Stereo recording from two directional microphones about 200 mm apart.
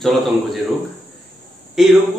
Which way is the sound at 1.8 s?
5° right (ahead or behind).